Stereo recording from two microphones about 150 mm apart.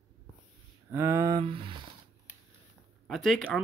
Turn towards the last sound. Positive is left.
turn(degrees=5)  # may be behind; listen again after turning